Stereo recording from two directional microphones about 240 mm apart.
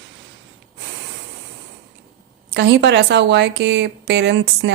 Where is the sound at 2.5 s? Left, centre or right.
Right.